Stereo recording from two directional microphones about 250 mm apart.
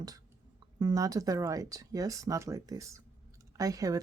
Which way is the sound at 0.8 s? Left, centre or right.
Centre.